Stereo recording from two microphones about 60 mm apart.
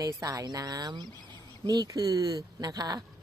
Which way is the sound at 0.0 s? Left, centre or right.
Right.